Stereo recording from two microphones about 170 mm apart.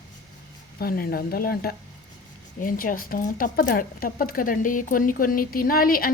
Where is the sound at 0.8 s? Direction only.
60° left (ahead or behind).